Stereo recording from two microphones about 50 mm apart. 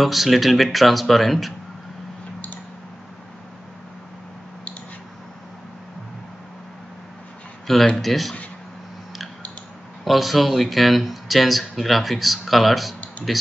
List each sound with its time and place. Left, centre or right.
0.0 s speech: centre
7.9 s speech: centre
10.0 s speech: centre